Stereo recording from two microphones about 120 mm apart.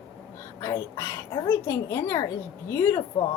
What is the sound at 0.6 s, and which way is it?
Speech, 25° left (ahead or behind).